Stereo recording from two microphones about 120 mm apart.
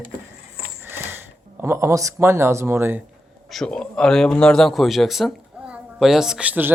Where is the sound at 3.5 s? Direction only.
5° left (ahead or behind).